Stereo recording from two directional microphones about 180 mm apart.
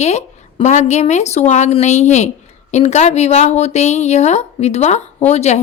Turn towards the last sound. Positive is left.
turn(degrees=40)  # may be behind; listen again after turning